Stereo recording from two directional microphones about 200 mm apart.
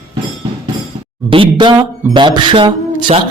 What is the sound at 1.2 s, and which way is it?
A man's voice, 25° right (ahead or behind).